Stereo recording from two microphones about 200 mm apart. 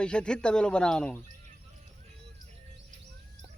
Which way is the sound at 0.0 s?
5° left (ahead or behind).